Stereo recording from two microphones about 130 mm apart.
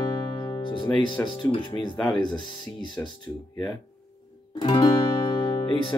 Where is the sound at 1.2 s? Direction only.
35° left (ahead or behind).